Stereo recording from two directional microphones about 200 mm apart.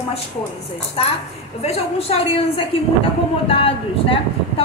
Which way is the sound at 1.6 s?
30° left (ahead or behind).